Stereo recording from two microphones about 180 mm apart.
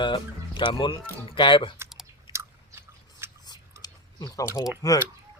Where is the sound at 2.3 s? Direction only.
15° right (ahead or behind).